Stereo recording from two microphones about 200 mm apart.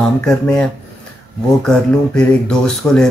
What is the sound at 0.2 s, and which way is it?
Speech, 5° left (ahead or behind).